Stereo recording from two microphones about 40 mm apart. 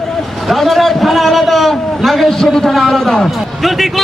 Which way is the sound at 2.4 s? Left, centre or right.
Centre.